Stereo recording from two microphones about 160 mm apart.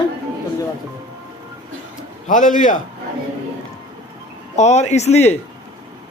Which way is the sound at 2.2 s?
50° left (ahead or behind).